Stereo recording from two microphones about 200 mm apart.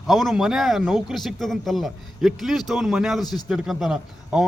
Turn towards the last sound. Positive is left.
turn(degrees=-5)  # may be behind; listen again after turning